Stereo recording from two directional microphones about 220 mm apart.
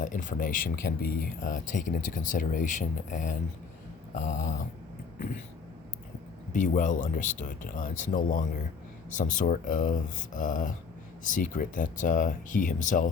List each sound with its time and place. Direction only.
0.0 s speech: 35° left (ahead or behind)
6.5 s speech: 35° left (ahead or behind)